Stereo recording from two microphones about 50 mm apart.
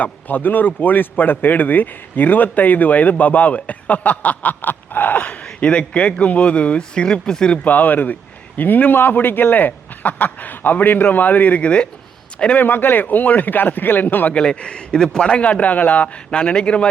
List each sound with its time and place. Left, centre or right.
0.0 s speech: left; by 7.6 s centre
7.6 s speech: left
12.5 s speech: left
14.3 s speech: left